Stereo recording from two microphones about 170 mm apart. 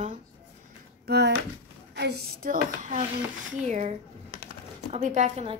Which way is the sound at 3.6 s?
45° right (ahead or behind).